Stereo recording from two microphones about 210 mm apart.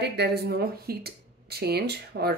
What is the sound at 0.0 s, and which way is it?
Speech, 50° right (ahead or behind).